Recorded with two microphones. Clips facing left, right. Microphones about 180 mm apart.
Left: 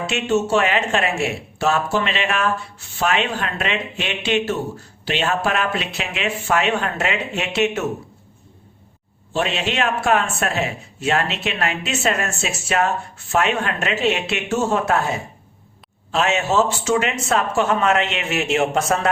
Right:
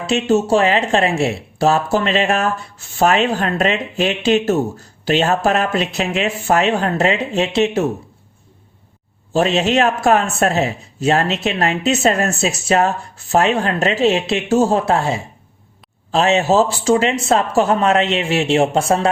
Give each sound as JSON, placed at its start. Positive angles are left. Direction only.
{"t": 0.1, "sound": "speech", "side_deg": -35}
{"t": 9.3, "sound": "speech", "side_deg": -40}